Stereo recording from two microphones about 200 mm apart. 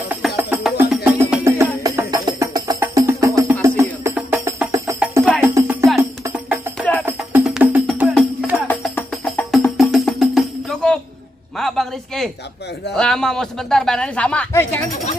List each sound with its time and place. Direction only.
0.4 s music: 10° right (ahead or behind)
1.1 s music: 15° right (ahead or behind)
6.8 s music: 5° left (ahead or behind)
11.5 s a sound: centre (ahead or behind)
12.9 s speech: 5° left (ahead or behind)